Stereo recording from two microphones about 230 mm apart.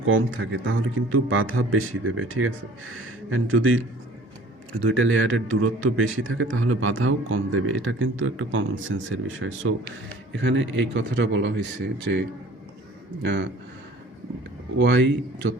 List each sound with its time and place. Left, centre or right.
0.0 s a man's voice: right
4.8 s a man's voice: right
13.2 s speech: right
14.8 s speech: right